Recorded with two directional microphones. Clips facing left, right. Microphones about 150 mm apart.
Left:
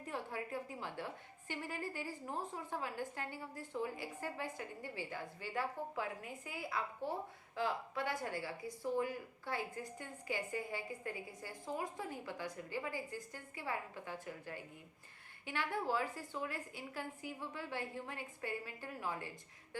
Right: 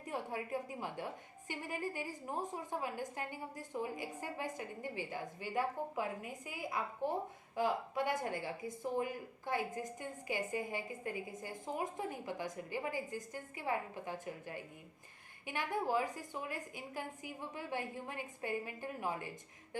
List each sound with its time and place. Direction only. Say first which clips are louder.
0.1 s a woman's voice: right 3 dB; 15° right (ahead or behind)